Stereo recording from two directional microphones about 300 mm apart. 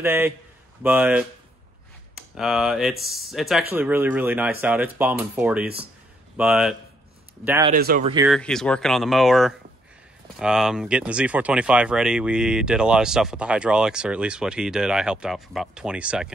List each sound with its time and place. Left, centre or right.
0.0 s a man's voice: centre
7.7 s speech: right
8.3 s speech: centre